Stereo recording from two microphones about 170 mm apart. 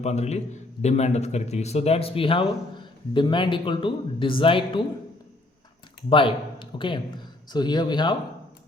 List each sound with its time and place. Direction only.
0.0 s a man's voice: 40° left (ahead or behind)
6.1 s speech: 30° left (ahead or behind)